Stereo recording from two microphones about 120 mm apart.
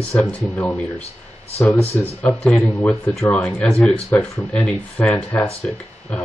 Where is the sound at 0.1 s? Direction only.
10° left (ahead or behind).